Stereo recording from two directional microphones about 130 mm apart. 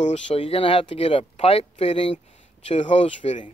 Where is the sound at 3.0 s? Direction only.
50° left (ahead or behind).